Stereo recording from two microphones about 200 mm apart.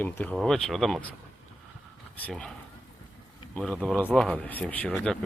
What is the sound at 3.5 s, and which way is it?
Speech, 5° left (ahead or behind).